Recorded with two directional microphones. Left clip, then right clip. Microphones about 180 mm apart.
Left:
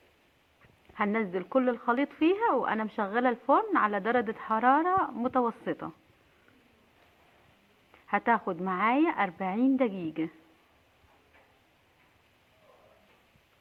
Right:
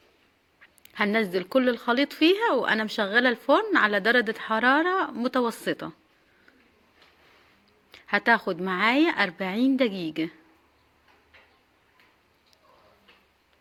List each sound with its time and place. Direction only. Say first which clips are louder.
0.9 s a woman's voice: right 5 dB; 30° right (ahead or behind)
7.9 s a woman's voice: right 5 dB; 25° right (ahead or behind)